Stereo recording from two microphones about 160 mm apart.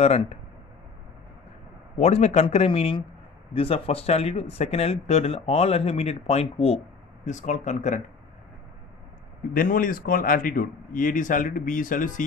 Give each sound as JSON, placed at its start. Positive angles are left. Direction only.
{"t": 0.0, "sound": "speech", "side_deg": 40}
{"t": 2.0, "sound": "speech", "side_deg": 40}
{"t": 9.5, "sound": "speech", "side_deg": 60}